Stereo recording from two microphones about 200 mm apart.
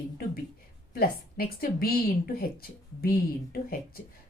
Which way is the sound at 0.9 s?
45° left (ahead or behind).